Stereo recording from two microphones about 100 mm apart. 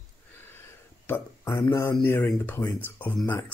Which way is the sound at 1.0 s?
25° left (ahead or behind).